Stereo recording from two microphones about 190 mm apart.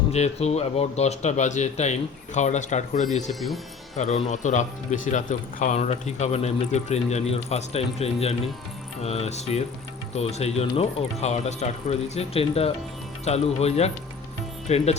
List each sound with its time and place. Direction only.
0.1 s speech: 35° left (ahead or behind)